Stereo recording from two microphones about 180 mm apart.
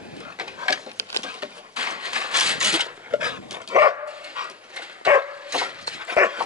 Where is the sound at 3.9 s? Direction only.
5° right (ahead or behind).